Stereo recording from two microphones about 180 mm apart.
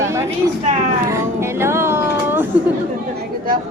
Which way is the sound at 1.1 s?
15° right (ahead or behind).